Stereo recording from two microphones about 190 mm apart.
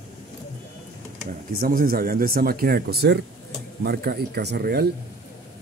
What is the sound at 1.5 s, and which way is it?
Speech, 50° right (ahead or behind).